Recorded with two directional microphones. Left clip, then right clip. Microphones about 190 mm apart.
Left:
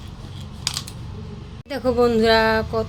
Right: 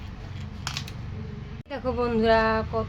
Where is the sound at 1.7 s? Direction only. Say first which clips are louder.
Left 8 dB; 20° left (ahead or behind).